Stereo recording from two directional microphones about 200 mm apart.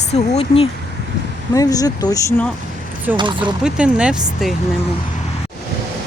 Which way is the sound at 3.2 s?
25° right (ahead or behind).